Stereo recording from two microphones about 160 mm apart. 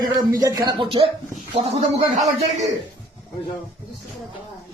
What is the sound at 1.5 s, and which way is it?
A man's voice, 40° right (ahead or behind).